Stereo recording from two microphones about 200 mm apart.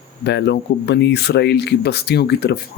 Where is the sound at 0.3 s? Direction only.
55° left (ahead or behind).